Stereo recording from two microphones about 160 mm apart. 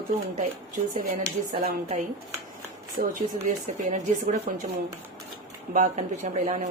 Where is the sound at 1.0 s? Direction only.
80° right.